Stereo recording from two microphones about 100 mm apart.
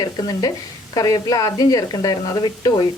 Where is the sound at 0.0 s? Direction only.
40° left (ahead or behind).